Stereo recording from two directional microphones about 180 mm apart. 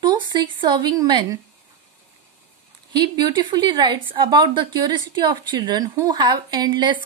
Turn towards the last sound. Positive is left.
turn(degrees=-25)  # may be behind; listen again after turning